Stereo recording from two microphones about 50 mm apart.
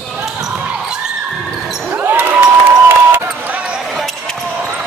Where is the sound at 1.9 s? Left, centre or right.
Right.